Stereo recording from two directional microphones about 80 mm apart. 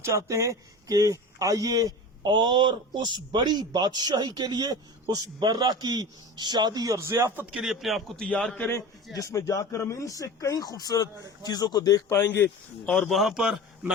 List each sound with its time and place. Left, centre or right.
0.0 s speech: right
2.3 s a man's voice: right
7.5 s a man's voice: centre
8.5 s a man's voice: left
9.1 s speech: left
12.1 s speech: left
12.8 s a man's voice: centre